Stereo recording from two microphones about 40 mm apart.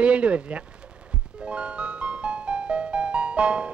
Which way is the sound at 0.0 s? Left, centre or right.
Right.